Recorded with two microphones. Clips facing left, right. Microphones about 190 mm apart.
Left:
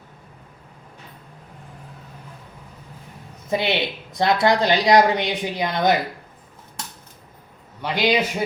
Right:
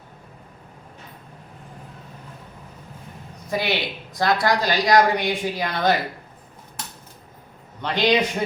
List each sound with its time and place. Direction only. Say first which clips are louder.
3.5 s speech: left 2 dB; 25° left (ahead or behind)
7.8 s a man's voice: right 1 dB; 10° left (ahead or behind)